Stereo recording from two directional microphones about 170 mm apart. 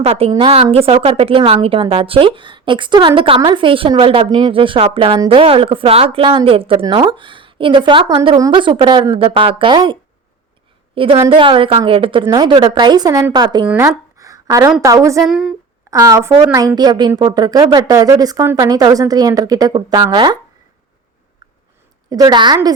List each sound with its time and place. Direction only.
0.0 s a woman's voice: 35° right (ahead or behind)
13.7 s a sound: 15° right (ahead or behind)
14.8 s a woman's voice: 20° right (ahead or behind)
15.2 s a woman's voice: 5° right (ahead or behind)
15.9 s a woman's voice: 20° right (ahead or behind)
22.1 s a woman's voice: 25° right (ahead or behind)